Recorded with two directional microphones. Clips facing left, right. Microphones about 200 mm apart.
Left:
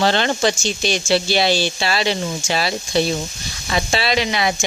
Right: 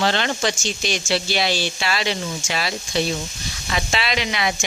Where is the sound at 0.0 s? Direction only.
35° left (ahead or behind).